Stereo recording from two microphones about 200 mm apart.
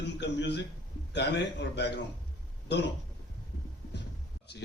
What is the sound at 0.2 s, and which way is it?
Speech, 60° left (ahead or behind).